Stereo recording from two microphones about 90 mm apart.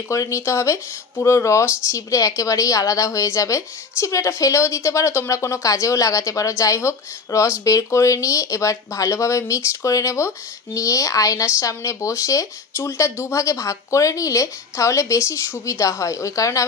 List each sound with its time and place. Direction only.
0.1 s speech: 35° left (ahead or behind)